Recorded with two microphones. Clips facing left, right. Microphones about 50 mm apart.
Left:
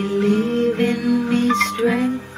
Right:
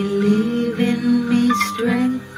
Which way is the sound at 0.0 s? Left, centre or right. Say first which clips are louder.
Right 1 dB; left.